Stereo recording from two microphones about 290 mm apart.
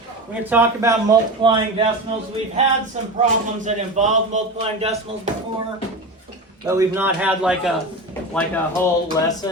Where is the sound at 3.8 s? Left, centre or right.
Right.